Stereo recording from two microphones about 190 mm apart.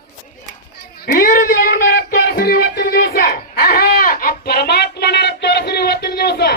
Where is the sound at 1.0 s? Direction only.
50° left (ahead or behind).